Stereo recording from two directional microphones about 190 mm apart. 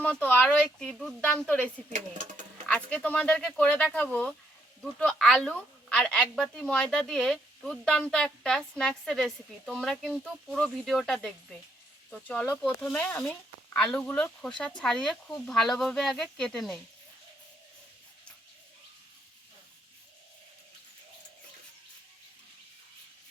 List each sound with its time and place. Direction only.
0.0 s a woman's voice: 10° left (ahead or behind)
1.9 s speech: 40° right (ahead or behind)
2.6 s a woman's voice: 5° left (ahead or behind)